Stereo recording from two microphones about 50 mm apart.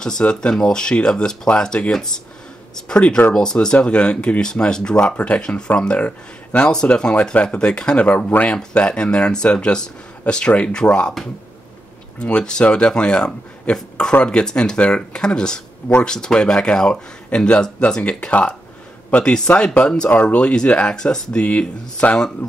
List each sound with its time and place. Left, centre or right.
0.0 s speech: centre
12.2 s speech: centre
20.1 s speech: left